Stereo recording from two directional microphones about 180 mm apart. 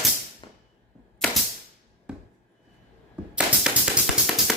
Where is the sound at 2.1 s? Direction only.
5° right (ahead or behind).